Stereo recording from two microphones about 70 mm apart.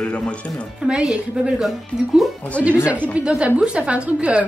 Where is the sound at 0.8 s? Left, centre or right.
Centre.